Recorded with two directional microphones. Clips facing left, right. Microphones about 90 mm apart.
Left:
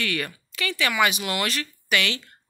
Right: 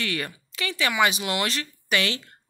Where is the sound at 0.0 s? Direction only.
25° right (ahead or behind).